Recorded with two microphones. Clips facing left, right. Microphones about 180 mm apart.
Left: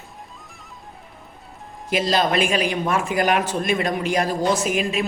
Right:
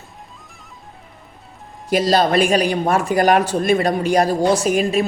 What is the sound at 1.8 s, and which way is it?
Speech, 35° right (ahead or behind).